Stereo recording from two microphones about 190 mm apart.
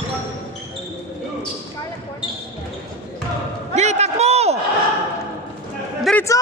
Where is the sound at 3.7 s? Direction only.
35° right (ahead or behind).